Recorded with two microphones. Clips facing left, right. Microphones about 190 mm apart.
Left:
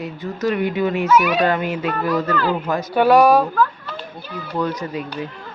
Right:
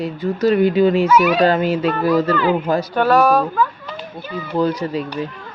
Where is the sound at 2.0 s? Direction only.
Centre (ahead or behind).